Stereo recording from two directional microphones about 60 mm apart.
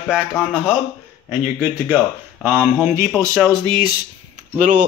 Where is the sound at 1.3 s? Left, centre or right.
Right.